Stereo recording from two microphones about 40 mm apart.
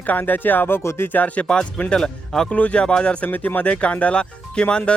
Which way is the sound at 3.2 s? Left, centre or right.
Left.